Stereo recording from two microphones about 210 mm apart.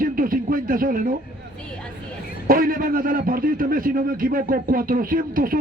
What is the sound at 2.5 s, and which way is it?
A man's voice, 40° right (ahead or behind).